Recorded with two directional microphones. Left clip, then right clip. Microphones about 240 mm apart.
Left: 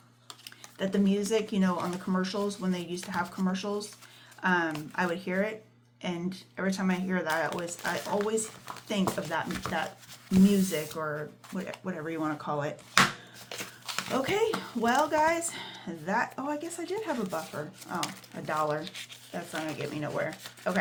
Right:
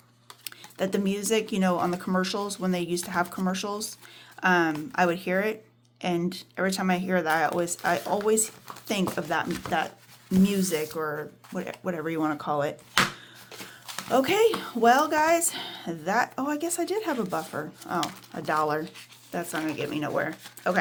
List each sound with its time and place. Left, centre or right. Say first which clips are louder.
0.4 s a woman's voice: right 5 dB; right
14.1 s a woman's voice: right 7 dB; right
19.9 s a woman's voice: right 6 dB; right